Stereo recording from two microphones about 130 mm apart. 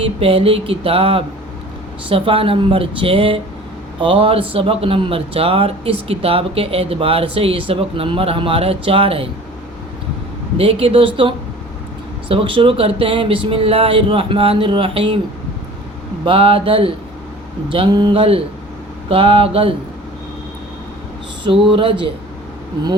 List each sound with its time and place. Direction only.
0.2 s speech: 45° right (ahead or behind)
10.6 s speech: 45° right (ahead or behind)
16.2 s speech: 45° right (ahead or behind)
21.4 s speech: 40° right (ahead or behind)